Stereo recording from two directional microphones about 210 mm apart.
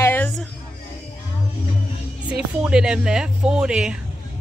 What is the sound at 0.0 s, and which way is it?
Music, 10° left (ahead or behind).